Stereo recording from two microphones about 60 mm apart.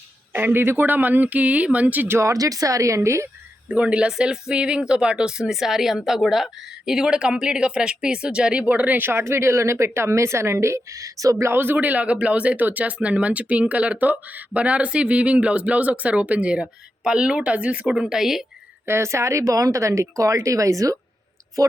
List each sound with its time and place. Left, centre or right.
0.3 s speech: right
2.1 s speech: right
3.7 s speech: centre
8.6 s speech: right
11.4 s speech: right
17.9 s speech: centre
18.9 s speech: right